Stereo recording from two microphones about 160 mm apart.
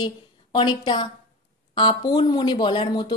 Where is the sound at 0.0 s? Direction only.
30° left (ahead or behind).